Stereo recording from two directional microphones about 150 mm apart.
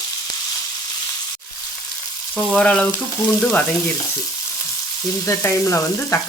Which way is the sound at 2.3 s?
5° left (ahead or behind).